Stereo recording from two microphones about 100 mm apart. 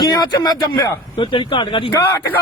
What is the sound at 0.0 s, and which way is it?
Speech, 45° left (ahead or behind).